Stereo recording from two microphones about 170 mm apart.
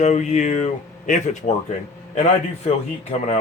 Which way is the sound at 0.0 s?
45° left (ahead or behind).